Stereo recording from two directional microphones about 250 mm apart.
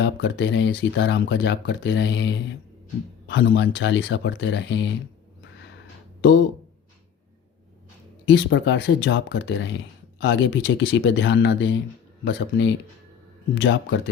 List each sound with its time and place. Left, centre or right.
0.0 s speech: left
8.2 s speech: left